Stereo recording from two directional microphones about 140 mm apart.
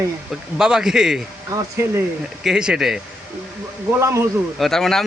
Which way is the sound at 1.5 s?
25° right (ahead or behind).